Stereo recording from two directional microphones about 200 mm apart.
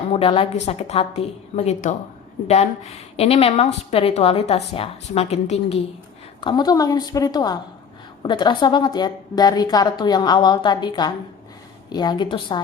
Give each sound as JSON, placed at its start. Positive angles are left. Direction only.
{"t": 0.1, "sound": "a woman's voice", "side_deg": 25}
{"t": 6.4, "sound": "a woman's voice", "side_deg": 20}